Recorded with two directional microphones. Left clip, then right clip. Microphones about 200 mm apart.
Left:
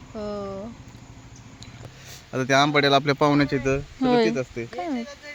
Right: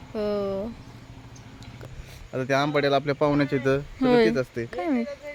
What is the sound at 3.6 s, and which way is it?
Speech, centre (ahead or behind).